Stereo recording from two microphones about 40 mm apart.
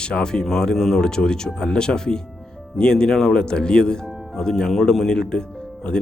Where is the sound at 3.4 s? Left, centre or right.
Left.